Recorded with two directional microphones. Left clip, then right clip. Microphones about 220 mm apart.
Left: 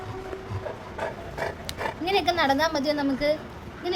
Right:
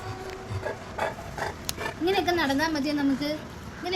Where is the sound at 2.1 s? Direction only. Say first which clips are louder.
Left 2 dB; 40° left (ahead or behind).